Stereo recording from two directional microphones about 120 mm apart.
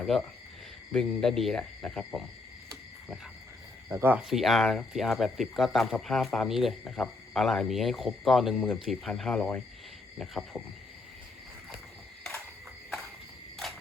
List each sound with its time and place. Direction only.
0.0 s speech: 5° left (ahead or behind)
3.8 s speech: 15° right (ahead or behind)
4.2 s speech: centre (ahead or behind)